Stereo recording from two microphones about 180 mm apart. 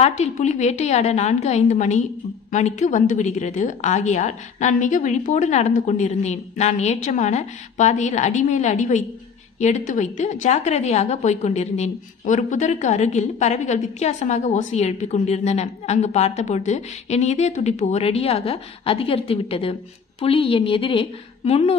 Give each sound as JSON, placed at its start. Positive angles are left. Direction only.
{"t": 0.0, "sound": "a woman's voice", "side_deg": 40}